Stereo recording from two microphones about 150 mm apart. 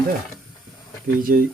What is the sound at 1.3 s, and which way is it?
Speech, 65° right (ahead or behind).